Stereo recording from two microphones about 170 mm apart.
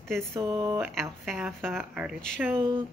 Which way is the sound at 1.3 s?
Centre (ahead or behind).